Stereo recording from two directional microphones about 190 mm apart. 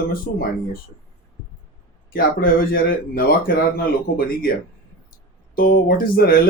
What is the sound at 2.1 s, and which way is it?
Speech, 50° left (ahead or behind).